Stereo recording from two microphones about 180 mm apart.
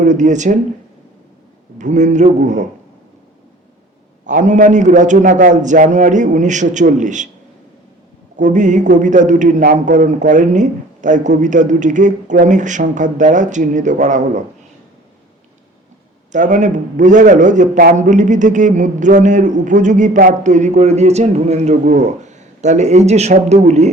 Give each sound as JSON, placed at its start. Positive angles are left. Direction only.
{"t": 0.0, "sound": "a man's voice", "side_deg": -45}
{"t": 1.8, "sound": "a man's voice", "side_deg": -40}
{"t": 4.3, "sound": "a man's voice", "side_deg": -45}
{"t": 8.4, "sound": "a man's voice", "side_deg": -45}
{"t": 16.3, "sound": "a man's voice", "side_deg": -45}